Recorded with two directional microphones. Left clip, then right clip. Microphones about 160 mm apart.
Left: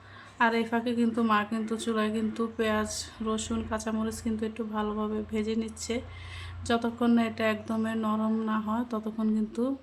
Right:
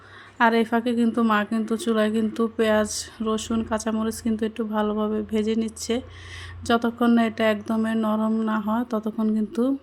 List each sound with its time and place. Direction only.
0.3 s a woman's voice: 30° right (ahead or behind)